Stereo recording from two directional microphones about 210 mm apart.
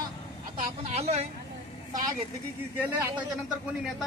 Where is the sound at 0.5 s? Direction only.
30° right (ahead or behind).